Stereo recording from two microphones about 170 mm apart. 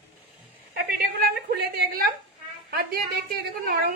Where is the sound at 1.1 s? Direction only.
65° right (ahead or behind).